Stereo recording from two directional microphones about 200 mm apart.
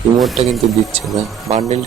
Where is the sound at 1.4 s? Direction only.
30° right (ahead or behind).